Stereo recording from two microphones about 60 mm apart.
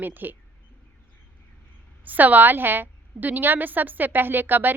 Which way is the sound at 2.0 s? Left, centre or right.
Right.